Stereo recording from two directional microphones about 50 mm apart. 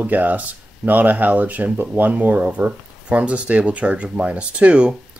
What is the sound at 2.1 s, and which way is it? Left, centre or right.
Speech, right.